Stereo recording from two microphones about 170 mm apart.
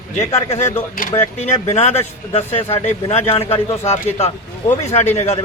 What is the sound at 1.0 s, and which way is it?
Speech, 55° left (ahead or behind).